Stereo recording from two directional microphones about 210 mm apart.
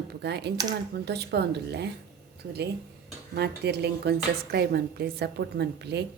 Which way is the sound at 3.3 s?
50° right (ahead or behind).